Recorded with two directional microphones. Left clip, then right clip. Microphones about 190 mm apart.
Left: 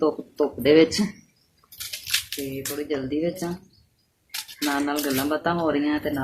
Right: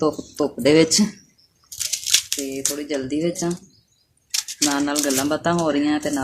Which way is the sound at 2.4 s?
50° right (ahead or behind).